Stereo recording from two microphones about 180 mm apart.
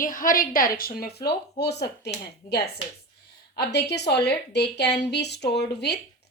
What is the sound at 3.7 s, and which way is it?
Speech, 70° left (ahead or behind).